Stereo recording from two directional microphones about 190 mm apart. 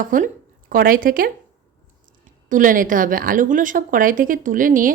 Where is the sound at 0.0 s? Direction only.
45° right (ahead or behind).